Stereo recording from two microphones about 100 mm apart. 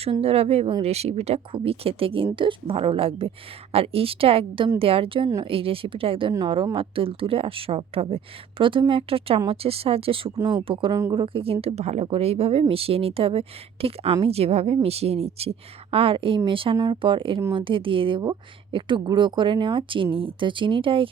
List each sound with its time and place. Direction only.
0.0 s a woman's voice: 80° right
10.3 s speech: 45° right (ahead or behind)
10.7 s speech: 60° right (ahead or behind)
11.6 s a woman's voice: 90° right; by 21.1 s 60° right (ahead or behind)